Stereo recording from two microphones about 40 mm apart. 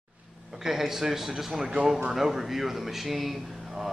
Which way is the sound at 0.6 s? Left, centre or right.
Centre.